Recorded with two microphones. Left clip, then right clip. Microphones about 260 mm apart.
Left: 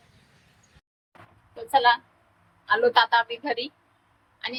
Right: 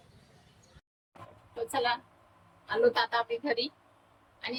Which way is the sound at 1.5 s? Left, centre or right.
Centre.